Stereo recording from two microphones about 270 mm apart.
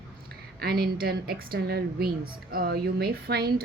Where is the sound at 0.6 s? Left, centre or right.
Right.